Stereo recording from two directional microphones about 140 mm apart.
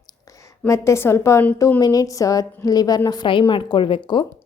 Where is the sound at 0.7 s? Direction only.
20° left (ahead or behind).